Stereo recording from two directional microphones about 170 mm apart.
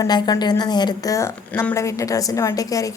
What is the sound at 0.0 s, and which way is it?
A woman's voice, 25° left (ahead or behind).